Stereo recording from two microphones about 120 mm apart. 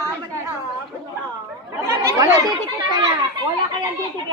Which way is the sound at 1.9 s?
30° right (ahead or behind).